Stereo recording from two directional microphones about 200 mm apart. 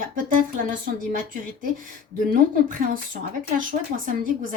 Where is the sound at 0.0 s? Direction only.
45° right (ahead or behind).